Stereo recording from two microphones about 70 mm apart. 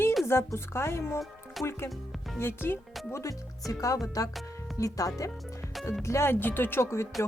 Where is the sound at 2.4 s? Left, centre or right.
Left.